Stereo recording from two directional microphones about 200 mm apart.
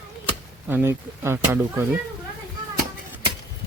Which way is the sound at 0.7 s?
10° right (ahead or behind).